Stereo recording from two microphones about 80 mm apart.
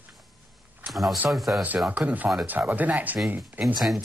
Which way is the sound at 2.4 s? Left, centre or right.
Right.